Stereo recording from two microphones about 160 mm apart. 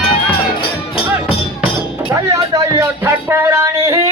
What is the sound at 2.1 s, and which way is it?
Music, 20° right (ahead or behind).